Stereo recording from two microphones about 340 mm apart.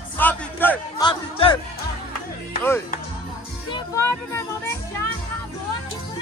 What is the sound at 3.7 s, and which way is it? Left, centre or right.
Speech, centre.